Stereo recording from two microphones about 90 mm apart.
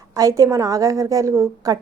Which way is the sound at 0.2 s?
40° right (ahead or behind).